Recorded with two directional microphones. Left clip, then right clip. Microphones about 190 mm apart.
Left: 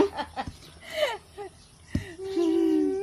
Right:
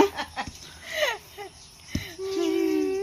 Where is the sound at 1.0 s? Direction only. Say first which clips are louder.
Right 1 dB; 25° left (ahead or behind).